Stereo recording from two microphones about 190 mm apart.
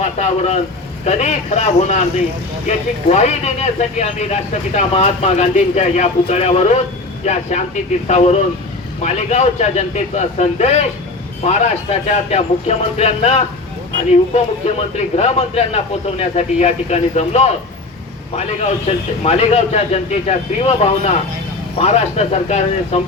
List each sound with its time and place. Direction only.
0.0 s speech: 35° left (ahead or behind)
15.1 s speech: 35° left (ahead or behind)
18.9 s speech: 35° left (ahead or behind)